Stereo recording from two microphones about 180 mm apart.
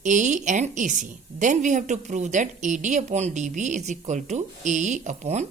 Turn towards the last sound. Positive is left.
turn(degrees=-40)  # may be behind; listen again after turning